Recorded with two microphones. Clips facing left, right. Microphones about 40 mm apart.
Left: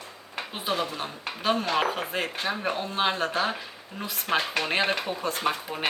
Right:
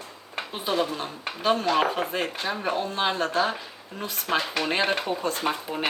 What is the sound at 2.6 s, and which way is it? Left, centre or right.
Speech, left.